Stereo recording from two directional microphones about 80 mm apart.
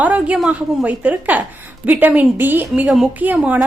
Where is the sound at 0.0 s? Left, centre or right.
Centre.